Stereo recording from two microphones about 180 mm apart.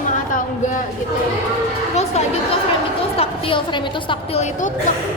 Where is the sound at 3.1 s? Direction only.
30° left (ahead or behind).